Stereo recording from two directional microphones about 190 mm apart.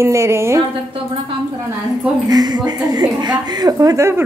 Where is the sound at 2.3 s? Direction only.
20° right (ahead or behind).